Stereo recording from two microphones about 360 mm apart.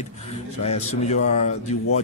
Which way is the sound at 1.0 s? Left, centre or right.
Centre.